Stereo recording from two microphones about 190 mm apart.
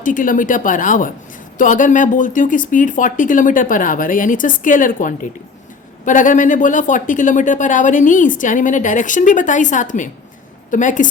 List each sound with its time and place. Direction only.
0.0 s speech: 45° left (ahead or behind)